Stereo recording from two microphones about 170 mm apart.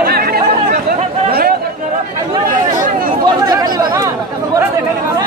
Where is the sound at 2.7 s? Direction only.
50° right (ahead or behind).